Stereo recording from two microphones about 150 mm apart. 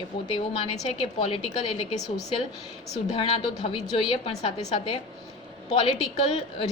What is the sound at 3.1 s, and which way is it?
A woman's voice, 45° left (ahead or behind).